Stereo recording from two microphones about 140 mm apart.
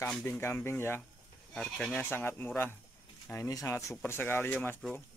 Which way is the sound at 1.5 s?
5° left (ahead or behind).